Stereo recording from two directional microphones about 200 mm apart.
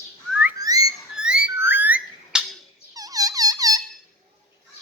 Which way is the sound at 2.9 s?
15° right (ahead or behind).